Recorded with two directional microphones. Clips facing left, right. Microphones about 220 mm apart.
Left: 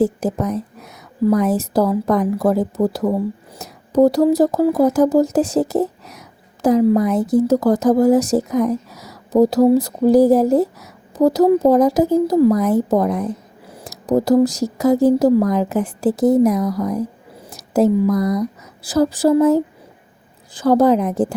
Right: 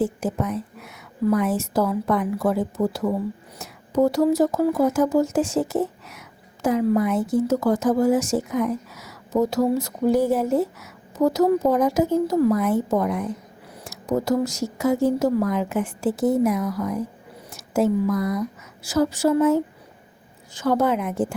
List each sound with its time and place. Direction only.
0.0 s speech: 40° left (ahead or behind)